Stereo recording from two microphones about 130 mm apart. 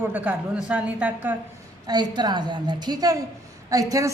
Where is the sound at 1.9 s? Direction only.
30° right (ahead or behind).